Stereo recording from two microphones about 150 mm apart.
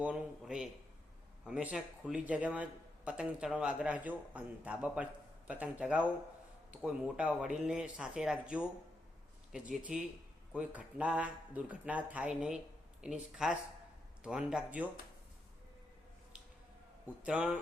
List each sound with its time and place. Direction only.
0.0 s a man's voice: 5° right (ahead or behind)
17.2 s a man's voice: 10° right (ahead or behind)